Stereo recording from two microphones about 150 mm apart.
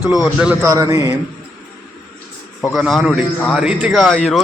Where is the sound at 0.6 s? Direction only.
20° right (ahead or behind).